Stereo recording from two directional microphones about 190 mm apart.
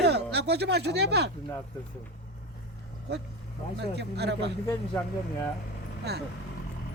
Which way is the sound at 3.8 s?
60° right (ahead or behind).